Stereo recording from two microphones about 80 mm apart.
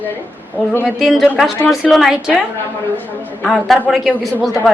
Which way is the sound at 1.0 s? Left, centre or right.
Centre.